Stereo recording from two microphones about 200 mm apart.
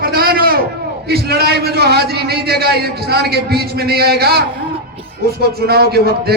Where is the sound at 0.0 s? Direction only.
50° right (ahead or behind).